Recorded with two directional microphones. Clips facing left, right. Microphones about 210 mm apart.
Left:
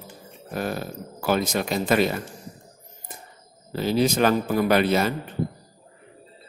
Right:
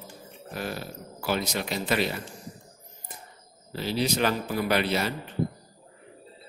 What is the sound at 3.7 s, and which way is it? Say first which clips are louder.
A man's voice: left 6 dB; 50° left (ahead or behind).